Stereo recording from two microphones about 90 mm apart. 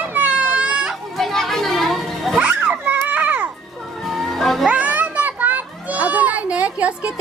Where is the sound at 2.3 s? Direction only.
15° right (ahead or behind).